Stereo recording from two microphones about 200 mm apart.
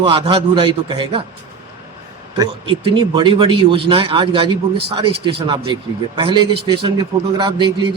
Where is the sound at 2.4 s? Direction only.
25° right (ahead or behind).